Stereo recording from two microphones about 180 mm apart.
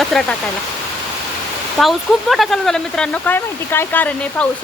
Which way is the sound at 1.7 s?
Centre (ahead or behind).